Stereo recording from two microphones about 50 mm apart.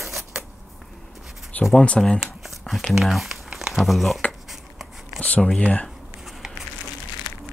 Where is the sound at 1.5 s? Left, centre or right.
Left.